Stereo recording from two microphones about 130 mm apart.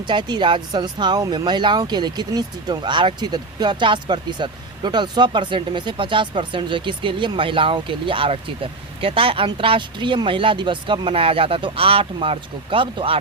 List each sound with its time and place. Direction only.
0.1 s speech: 35° right (ahead or behind)